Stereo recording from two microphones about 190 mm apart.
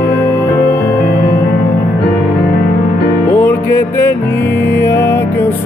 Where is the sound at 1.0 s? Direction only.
60° left (ahead or behind).